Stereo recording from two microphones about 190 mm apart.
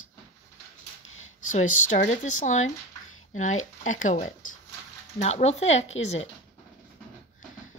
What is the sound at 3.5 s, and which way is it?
Speech, 90° left.